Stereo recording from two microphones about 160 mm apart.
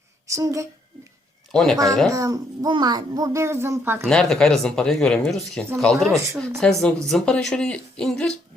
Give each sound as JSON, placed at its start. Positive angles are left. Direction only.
{"t": 0.3, "sound": "a child's voice", "side_deg": -20}
{"t": 1.5, "sound": "speech", "side_deg": 0}
{"t": 2.1, "sound": "a child's voice", "side_deg": -20}
{"t": 4.0, "sound": "speech", "side_deg": 5}